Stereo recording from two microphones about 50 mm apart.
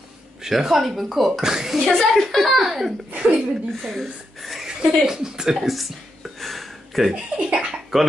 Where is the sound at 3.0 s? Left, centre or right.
Right.